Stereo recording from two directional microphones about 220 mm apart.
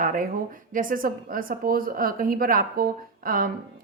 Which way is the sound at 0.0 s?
40° right (ahead or behind).